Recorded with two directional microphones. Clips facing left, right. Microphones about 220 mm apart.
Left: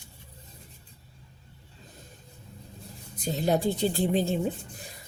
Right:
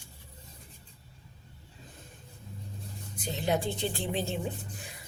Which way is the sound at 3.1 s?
40° left (ahead or behind).